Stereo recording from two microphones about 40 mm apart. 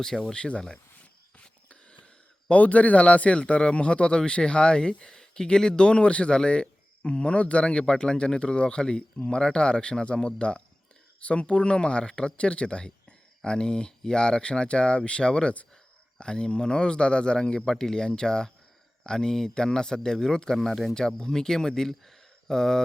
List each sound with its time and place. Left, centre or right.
0.3 s a man's voice: left
2.5 s a man's voice: left; by 20.6 s centre
20.6 s speech: centre
20.9 s speech: centre